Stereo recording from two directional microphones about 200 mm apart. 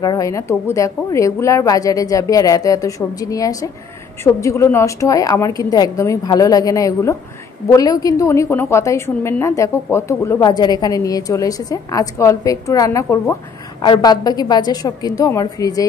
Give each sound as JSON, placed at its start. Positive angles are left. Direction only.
{"t": 0.0, "sound": "a woman's voice", "side_deg": 20}